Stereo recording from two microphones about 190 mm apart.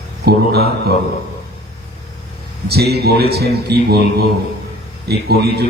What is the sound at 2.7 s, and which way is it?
Mantra, 55° right (ahead or behind).